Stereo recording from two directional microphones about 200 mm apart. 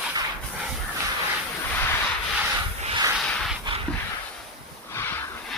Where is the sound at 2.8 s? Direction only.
25° right (ahead or behind).